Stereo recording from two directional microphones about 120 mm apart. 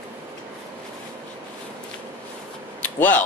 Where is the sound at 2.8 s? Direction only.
15° left (ahead or behind).